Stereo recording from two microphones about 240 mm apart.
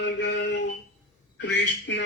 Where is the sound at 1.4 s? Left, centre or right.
Left.